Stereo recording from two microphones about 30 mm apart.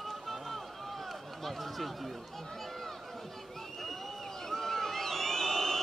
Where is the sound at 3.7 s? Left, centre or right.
Centre.